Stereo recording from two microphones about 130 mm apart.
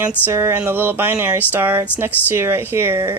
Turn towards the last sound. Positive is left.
turn(degrees=-15)  # may be behind; listen again after turning